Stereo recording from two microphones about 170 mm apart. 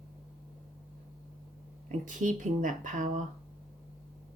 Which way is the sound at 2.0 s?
50° right (ahead or behind).